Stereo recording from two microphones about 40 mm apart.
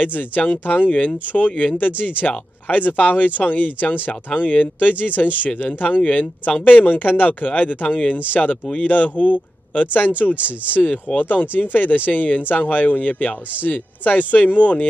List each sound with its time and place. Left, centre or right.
0.0 s speech: left
10.3 s speech: right
11.1 s speech: left